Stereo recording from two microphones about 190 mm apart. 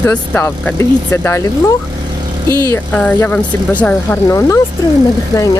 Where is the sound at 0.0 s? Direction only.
10° left (ahead or behind).